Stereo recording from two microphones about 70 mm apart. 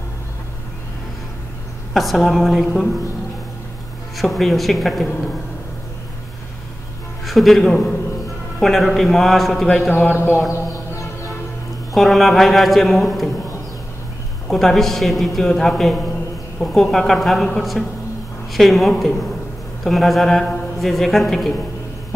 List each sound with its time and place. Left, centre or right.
2.0 s a man's voice: centre
4.2 s a man's voice: centre
7.2 s a man's voice: centre
10.1 s speech: left
10.9 s music: left
11.9 s a man's voice: centre
14.5 s a man's voice: centre